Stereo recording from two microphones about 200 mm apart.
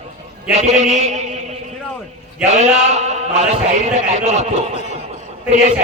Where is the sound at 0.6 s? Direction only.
35° right (ahead or behind).